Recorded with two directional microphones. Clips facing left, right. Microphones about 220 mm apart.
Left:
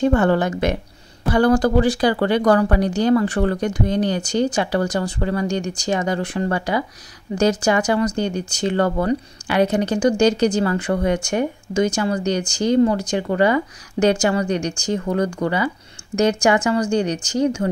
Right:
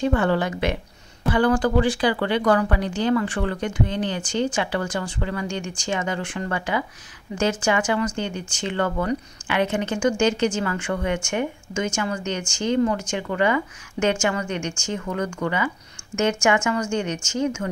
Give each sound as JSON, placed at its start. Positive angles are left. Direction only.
{"t": 0.0, "sound": "speech", "side_deg": 45}